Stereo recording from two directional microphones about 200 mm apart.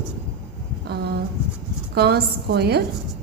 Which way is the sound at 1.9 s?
50° right (ahead or behind).